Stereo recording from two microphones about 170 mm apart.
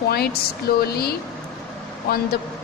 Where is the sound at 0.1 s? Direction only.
65° left (ahead or behind).